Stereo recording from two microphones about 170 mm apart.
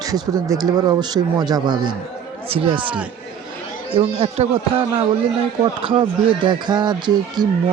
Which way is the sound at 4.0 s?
35° right (ahead or behind).